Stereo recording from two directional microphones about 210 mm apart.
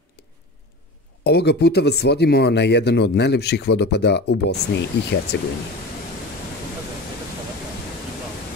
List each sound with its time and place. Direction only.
1.2 s speech: 50° left (ahead or behind)